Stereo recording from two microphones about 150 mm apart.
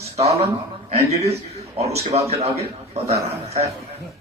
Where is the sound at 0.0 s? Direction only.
45° right (ahead or behind).